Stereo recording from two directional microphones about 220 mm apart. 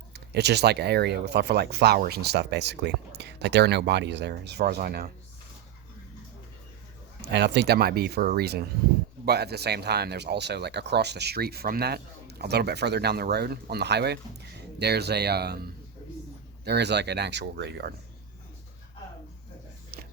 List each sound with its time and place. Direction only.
0.1 s speech: 50° right (ahead or behind)
7.2 s speech: 50° right (ahead or behind)